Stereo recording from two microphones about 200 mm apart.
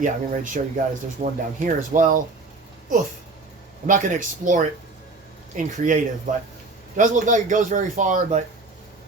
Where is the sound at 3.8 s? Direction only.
40° right (ahead or behind).